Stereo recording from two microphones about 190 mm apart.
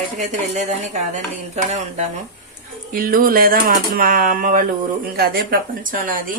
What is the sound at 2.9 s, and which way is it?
Speech, 50° right (ahead or behind).